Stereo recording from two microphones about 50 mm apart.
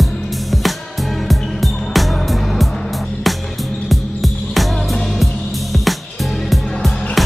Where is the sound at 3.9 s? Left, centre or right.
Centre.